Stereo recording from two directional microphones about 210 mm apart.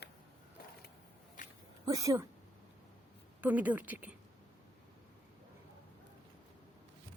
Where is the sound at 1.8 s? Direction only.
15° right (ahead or behind).